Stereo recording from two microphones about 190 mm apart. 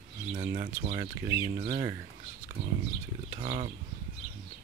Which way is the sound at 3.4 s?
35° right (ahead or behind).